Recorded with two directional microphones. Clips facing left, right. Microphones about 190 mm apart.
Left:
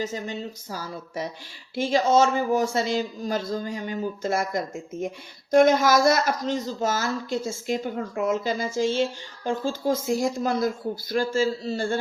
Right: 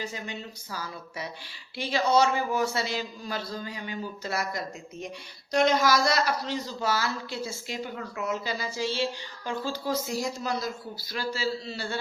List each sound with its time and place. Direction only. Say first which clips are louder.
0.0 s a man's voice: left 6 dB; 45° left (ahead or behind)